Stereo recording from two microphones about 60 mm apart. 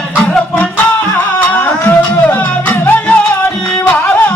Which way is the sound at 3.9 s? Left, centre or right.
Left.